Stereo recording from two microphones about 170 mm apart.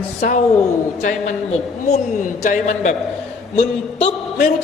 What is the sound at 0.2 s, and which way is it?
A man's voice, 50° left (ahead or behind).